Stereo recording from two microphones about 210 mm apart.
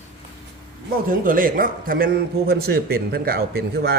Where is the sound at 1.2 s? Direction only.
40° right (ahead or behind).